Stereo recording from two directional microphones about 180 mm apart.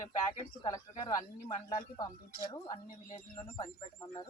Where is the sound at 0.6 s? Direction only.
20° left (ahead or behind).